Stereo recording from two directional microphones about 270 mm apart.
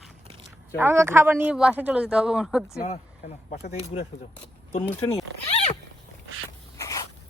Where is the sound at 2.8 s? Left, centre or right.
Left.